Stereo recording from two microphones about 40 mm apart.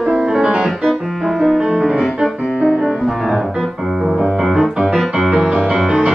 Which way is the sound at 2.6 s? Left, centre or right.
Right.